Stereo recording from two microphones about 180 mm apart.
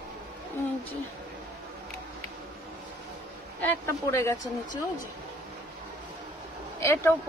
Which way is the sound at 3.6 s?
15° left (ahead or behind).